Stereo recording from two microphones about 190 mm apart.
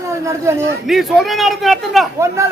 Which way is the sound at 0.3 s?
15° right (ahead or behind).